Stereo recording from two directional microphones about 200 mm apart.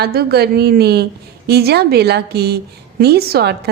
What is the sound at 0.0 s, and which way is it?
A woman's voice, 50° right (ahead or behind).